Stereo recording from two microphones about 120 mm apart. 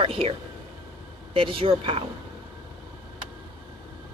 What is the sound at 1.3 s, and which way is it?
Speech, 50° right (ahead or behind).